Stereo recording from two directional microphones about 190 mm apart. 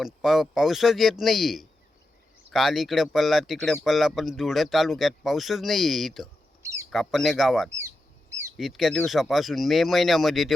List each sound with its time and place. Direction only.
0.0 s speech: centre (ahead or behind)
6.6 s a sound: 15° right (ahead or behind)
6.9 s speech: centre (ahead or behind)
7.8 s bird: 15° right (ahead or behind)
8.5 s speech: centre (ahead or behind)